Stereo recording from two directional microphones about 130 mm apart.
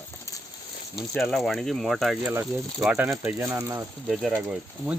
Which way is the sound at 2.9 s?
15° right (ahead or behind).